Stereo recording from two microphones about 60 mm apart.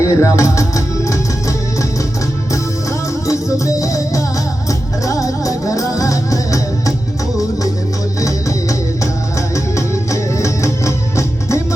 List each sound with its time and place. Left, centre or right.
0.0 s music: left
3.2 s music: left
9.7 s music: left